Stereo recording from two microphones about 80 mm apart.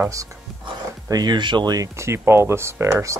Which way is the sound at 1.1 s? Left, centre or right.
Right.